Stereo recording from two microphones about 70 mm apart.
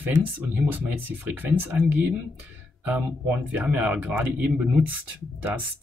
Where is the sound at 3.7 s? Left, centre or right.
Right.